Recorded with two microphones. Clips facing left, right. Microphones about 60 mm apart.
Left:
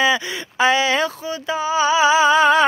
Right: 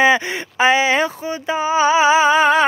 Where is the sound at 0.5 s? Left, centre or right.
Right.